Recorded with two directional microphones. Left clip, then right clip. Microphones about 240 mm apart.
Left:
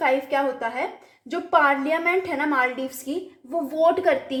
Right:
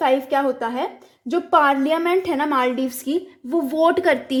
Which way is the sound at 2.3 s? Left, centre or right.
Right.